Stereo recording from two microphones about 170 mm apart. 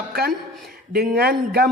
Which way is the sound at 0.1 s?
65° right (ahead or behind).